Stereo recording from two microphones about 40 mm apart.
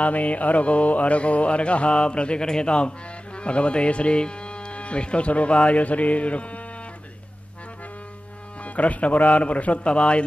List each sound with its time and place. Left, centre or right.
0.0 s music: left
2.4 s a man's voice: left
5.7 s music: left
8.6 s music: left